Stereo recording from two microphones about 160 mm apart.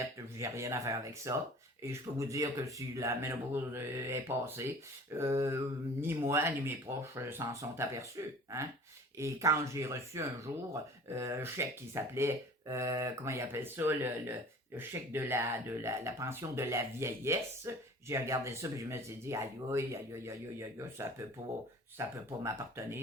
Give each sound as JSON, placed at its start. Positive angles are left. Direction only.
{"t": 0.0, "sound": "speech", "side_deg": -20}